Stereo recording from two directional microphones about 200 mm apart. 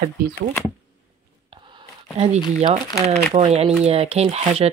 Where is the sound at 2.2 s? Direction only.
30° right (ahead or behind).